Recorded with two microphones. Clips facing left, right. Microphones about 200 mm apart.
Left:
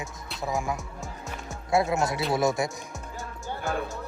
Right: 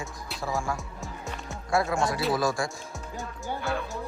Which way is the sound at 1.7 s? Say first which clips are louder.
Left 1 dB; 20° left (ahead or behind).